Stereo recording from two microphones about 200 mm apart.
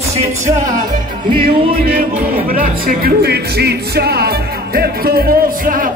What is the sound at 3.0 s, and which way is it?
Speech, 50° right (ahead or behind).